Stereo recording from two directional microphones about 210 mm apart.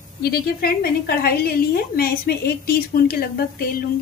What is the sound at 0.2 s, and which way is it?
A woman's voice, 50° left (ahead or behind).